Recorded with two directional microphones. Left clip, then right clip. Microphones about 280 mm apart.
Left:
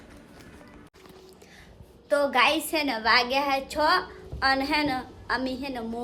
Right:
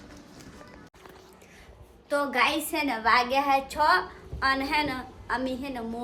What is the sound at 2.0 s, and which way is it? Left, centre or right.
A woman's voice, centre.